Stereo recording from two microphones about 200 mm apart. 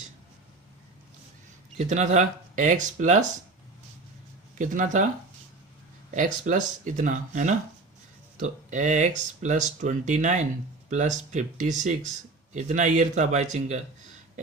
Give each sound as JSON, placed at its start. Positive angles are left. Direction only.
{"t": 1.8, "sound": "speech", "side_deg": -35}
{"t": 4.5, "sound": "speech", "side_deg": -40}
{"t": 6.1, "sound": "speech", "side_deg": -40}